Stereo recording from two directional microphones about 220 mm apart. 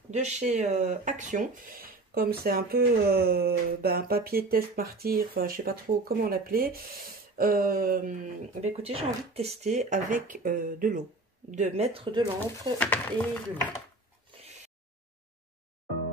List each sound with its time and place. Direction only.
0.1 s speech: 30° right (ahead or behind)
12.7 s speech: 5° left (ahead or behind)